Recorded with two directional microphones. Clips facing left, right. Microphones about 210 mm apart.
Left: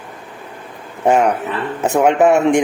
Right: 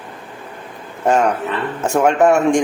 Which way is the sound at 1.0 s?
15° left (ahead or behind).